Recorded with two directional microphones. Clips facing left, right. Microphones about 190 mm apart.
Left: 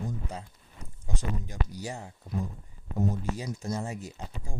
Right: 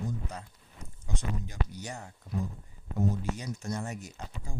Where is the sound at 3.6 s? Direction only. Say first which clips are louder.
Left 2 dB; 30° left (ahead or behind).